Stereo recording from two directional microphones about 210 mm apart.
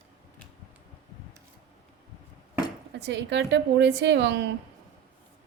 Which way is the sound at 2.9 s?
55° right (ahead or behind).